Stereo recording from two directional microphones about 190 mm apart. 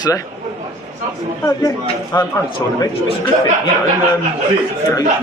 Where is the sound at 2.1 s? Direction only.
20° left (ahead or behind).